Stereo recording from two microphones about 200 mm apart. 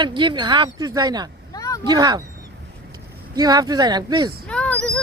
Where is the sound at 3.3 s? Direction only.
20° right (ahead or behind).